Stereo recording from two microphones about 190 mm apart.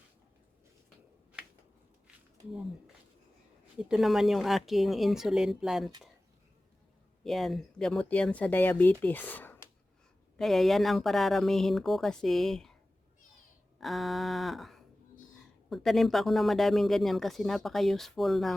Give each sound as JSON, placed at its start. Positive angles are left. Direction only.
{"t": 2.5, "sound": "speech", "side_deg": 0}
{"t": 7.3, "sound": "speech", "side_deg": 0}
{"t": 13.7, "sound": "a sound", "side_deg": 0}
{"t": 15.7, "sound": "speech", "side_deg": 0}